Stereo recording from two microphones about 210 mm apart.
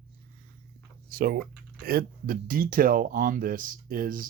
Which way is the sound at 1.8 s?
45° right (ahead or behind).